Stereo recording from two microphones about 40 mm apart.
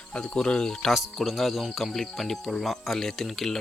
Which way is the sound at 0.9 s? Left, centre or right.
Centre.